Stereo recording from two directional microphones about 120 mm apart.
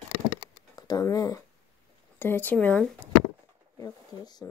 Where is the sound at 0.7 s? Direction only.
30° left (ahead or behind).